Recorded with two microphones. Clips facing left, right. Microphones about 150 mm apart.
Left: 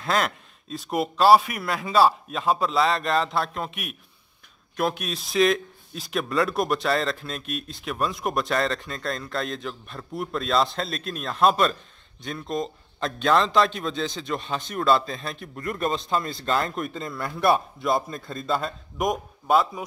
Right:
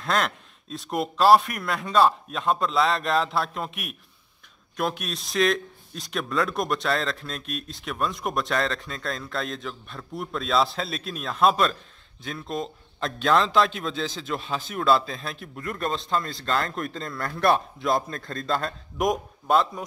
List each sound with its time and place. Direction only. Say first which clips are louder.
0.0 s a man's voice: left 1 dB; centre (ahead or behind)